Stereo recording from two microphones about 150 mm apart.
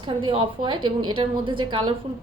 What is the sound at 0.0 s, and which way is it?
A woman's voice, 35° right (ahead or behind).